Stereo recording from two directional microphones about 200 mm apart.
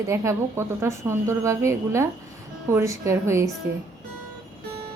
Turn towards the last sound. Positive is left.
turn(degrees=-15)  # may be behind; listen again after turning